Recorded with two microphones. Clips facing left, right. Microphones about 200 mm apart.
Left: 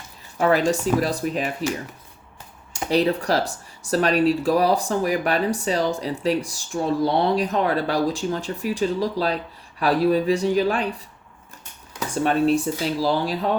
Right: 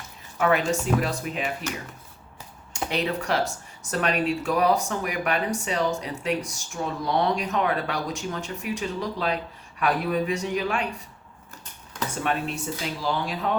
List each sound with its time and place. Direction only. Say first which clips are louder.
0.3 s speech: left 4 dB; 35° left (ahead or behind)
2.9 s speech: left 6 dB; 35° left (ahead or behind)
12.1 s speech: left 10 dB; 35° left (ahead or behind)